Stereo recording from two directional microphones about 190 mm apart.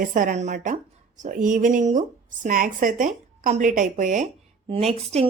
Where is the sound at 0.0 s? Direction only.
45° right (ahead or behind).